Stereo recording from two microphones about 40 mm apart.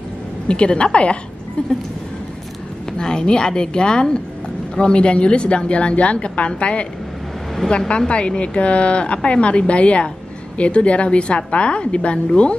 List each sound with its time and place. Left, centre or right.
0.5 s a woman's voice: left
3.0 s a woman's voice: centre
8.1 s a woman's voice: left